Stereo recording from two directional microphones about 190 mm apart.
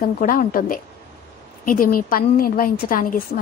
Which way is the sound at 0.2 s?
45° left (ahead or behind).